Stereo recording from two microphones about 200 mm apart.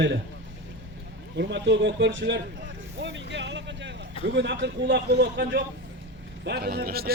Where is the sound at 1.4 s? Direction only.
60° right (ahead or behind).